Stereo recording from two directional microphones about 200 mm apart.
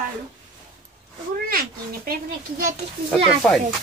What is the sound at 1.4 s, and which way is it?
Speech, 45° right (ahead or behind).